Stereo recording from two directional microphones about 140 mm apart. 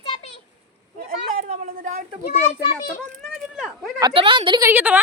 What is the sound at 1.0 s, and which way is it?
Speech, 90° right.